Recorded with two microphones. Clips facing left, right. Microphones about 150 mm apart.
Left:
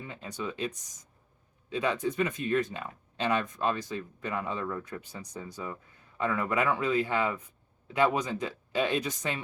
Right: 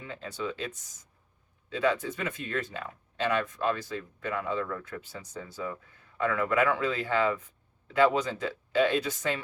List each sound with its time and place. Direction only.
0.1 s speech: 15° left (ahead or behind)